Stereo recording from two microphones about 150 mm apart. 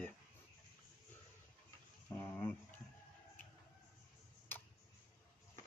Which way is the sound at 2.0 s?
15° left (ahead or behind).